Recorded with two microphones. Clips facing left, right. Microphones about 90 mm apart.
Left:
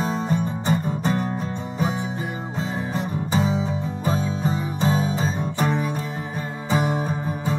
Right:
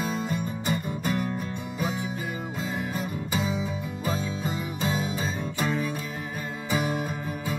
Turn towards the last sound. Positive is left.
turn(degrees=30)  # may be behind; listen again after turning